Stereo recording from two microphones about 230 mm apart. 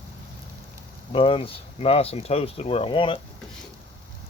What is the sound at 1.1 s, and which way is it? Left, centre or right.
Speech, left.